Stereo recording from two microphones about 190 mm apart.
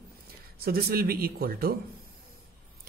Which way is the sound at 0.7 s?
50° right (ahead or behind).